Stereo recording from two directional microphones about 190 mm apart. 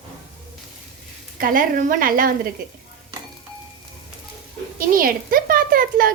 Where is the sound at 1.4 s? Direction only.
45° right (ahead or behind).